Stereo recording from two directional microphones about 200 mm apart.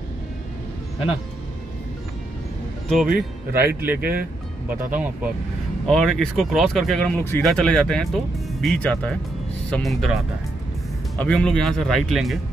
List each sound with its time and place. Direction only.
3.1 s speech: 50° right (ahead or behind)
3.8 s speech: 10° right (ahead or behind)
11.1 s speech: 5° left (ahead or behind)